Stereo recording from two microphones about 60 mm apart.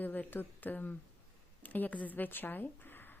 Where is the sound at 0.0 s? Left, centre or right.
Left.